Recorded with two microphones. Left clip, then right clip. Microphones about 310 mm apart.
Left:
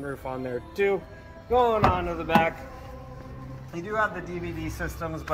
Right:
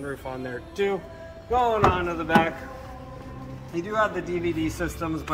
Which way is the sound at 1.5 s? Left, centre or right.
Left.